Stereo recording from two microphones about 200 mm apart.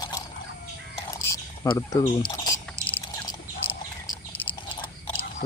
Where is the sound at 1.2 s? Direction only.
20° left (ahead or behind).